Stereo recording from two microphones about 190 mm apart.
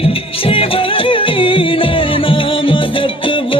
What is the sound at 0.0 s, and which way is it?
Music, 30° left (ahead or behind).